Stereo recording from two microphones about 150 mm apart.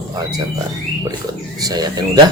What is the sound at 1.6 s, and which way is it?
Speech, 25° right (ahead or behind).